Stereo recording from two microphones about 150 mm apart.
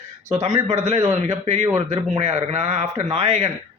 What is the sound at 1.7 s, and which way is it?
Speech, 45° right (ahead or behind).